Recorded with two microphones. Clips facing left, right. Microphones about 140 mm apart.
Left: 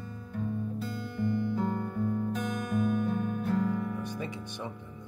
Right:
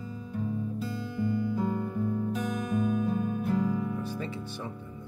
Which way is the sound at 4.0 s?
15° left (ahead or behind).